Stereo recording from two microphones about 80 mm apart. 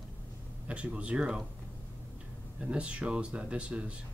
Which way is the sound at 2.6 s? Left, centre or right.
Centre.